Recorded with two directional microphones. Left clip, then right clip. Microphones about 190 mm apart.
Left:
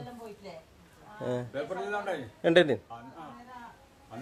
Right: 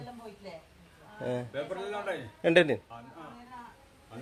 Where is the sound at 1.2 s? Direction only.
5° left (ahead or behind).